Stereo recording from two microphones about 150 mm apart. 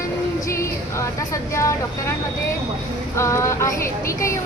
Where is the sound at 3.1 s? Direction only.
20° left (ahead or behind).